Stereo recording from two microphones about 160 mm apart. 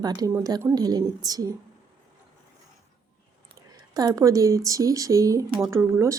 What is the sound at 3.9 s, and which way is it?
A woman's voice, 25° right (ahead or behind).